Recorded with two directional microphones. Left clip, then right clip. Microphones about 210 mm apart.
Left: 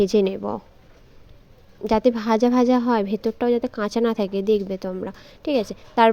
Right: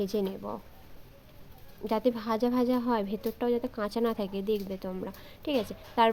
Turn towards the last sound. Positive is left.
turn(degrees=25)  # may be behind; listen again after turning